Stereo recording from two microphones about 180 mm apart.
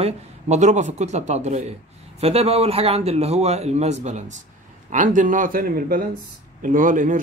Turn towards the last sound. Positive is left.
turn(degrees=-45)  # may be behind; listen again after turning